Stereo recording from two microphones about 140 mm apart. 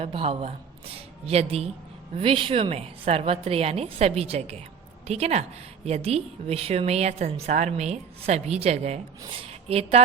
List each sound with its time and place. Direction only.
0.0 s a woman's voice: 45° right (ahead or behind)